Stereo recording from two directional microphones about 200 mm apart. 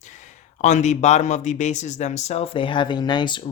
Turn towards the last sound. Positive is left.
turn(degrees=20)  # may be behind; listen again after turning